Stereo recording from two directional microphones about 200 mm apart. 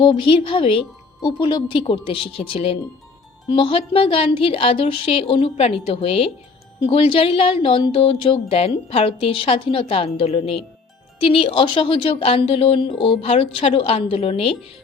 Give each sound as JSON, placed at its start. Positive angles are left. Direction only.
{"t": 0.0, "sound": "a woman's voice", "side_deg": 25}